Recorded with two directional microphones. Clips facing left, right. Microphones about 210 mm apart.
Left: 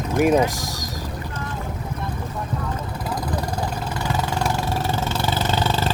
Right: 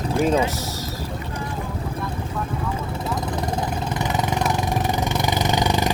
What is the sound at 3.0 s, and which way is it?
Vehicle, 25° right (ahead or behind).